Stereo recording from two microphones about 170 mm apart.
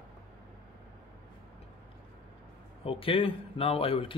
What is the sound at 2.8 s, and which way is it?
A man's voice, 35° left (ahead or behind).